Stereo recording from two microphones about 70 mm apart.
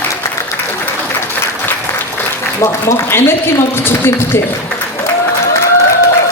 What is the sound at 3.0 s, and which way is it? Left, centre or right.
A man's voice, left.